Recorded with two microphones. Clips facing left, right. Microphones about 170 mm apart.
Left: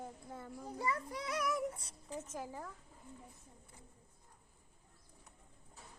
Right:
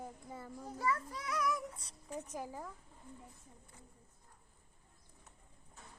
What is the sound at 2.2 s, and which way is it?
Speech, 15° right (ahead or behind).